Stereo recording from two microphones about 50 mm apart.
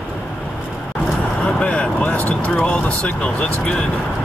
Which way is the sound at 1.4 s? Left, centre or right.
Left.